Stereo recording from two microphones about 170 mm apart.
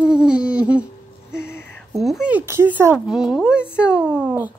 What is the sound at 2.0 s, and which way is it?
Speech, centre (ahead or behind).